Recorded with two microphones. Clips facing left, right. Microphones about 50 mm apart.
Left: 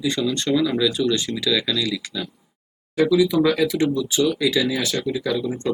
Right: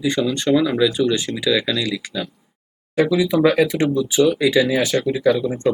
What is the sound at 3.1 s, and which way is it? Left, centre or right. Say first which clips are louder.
Speech: right 2 dB; right.